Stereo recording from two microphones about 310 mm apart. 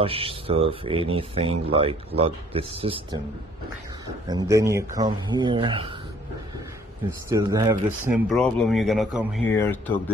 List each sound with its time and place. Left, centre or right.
0.0 s speech: centre
4.3 s speech: centre
7.2 s speech: centre
8.3 s speech: centre